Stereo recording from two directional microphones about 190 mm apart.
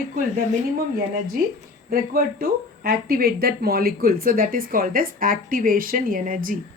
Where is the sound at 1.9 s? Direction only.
50° right (ahead or behind).